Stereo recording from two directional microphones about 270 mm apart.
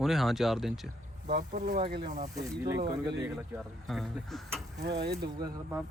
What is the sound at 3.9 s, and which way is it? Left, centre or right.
Speech, centre.